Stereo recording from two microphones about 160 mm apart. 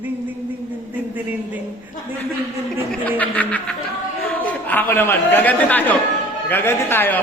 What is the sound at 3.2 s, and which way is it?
A man's voice, 10° left (ahead or behind).